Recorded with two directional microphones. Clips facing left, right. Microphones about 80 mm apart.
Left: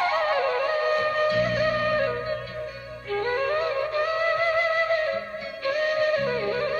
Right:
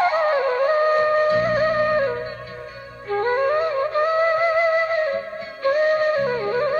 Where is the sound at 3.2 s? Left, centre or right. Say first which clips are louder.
Right 5 dB; right.